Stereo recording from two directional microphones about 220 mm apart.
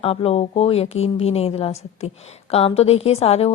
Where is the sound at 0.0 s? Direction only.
25° left (ahead or behind).